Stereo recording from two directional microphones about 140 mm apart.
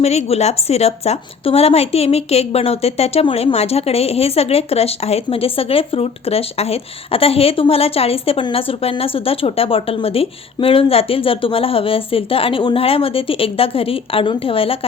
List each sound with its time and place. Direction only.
0.0 s a woman's voice: 50° left (ahead or behind)